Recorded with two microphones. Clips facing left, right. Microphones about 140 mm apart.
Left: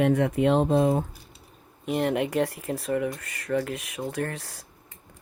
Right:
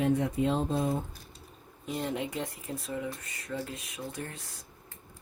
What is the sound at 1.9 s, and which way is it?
Speech, 70° left (ahead or behind).